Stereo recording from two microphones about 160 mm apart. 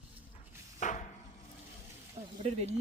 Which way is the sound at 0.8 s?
50° left (ahead or behind).